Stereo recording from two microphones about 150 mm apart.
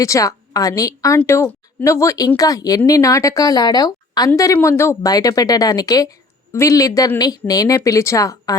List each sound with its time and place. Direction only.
0.0 s speech: 20° left (ahead or behind)